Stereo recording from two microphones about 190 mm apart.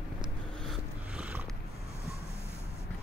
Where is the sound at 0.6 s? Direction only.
5° right (ahead or behind).